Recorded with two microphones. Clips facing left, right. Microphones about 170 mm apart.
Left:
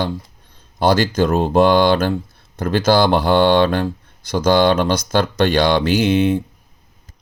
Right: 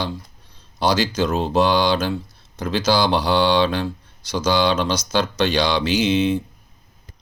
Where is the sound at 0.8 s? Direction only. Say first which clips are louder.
Left 4 dB; 50° left (ahead or behind).